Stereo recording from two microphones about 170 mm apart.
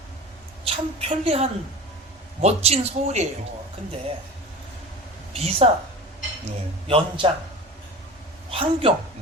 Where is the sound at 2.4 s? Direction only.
40° right (ahead or behind).